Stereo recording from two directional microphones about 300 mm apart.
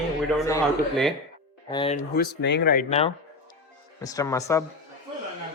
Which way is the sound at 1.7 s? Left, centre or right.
Centre.